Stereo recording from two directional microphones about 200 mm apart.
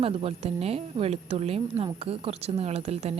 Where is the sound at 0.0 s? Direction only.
30° right (ahead or behind).